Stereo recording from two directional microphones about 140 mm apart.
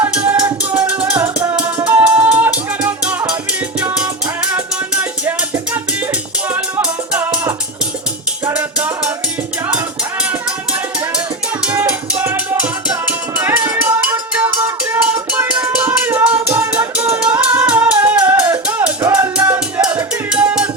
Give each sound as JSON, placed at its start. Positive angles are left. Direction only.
{"t": 0.1, "sound": "music", "side_deg": -5}
{"t": 8.5, "sound": "music", "side_deg": -10}
{"t": 11.6, "sound": "music", "side_deg": -10}
{"t": 15.6, "sound": "music", "side_deg": -15}